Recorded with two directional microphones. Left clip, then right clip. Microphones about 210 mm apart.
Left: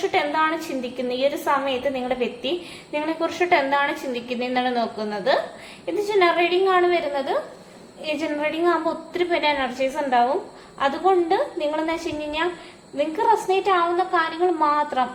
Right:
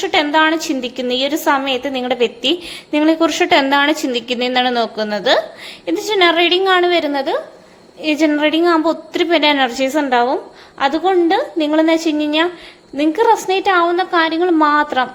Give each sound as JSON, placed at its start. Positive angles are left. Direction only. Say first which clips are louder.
{"t": 0.0, "sound": "a woman's voice", "louder": "right 7 dB", "side_deg": -50}